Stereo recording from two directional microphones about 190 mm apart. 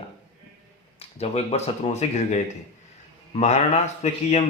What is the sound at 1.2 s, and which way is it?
Speech, 35° left (ahead or behind).